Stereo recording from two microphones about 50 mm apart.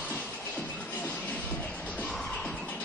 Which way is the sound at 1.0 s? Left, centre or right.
Left.